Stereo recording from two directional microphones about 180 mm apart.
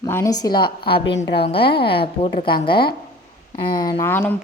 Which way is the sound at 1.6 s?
65° left (ahead or behind).